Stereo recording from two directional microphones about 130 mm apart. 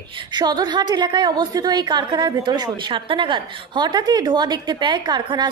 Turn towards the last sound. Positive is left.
turn(degrees=-35)  # may be behind; listen again after turning